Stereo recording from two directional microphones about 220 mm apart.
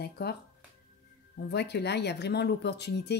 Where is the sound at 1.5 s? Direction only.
50° left (ahead or behind).